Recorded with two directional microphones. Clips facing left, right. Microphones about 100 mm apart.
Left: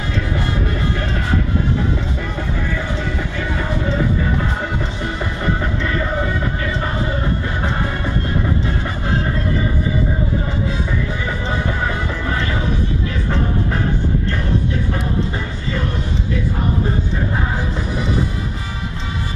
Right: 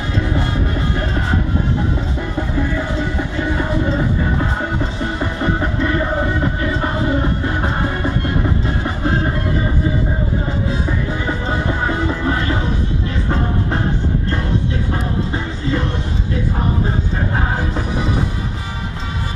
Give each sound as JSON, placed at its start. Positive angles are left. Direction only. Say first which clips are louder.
{"t": 2.7, "sound": "music", "louder": "right 2 dB", "side_deg": -25}
{"t": 5.2, "sound": "music", "louder": "right 2 dB", "side_deg": -20}
{"t": 11.4, "sound": "music", "louder": "right 1 dB", "side_deg": -20}